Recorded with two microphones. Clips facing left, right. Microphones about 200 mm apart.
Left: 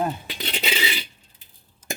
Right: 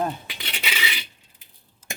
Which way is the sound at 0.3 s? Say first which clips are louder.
Left 6 dB; 35° left (ahead or behind).